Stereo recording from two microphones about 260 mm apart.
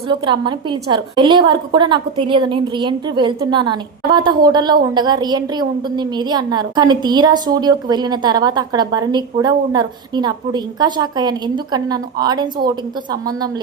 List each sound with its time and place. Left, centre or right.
0.1 s a woman's voice: centre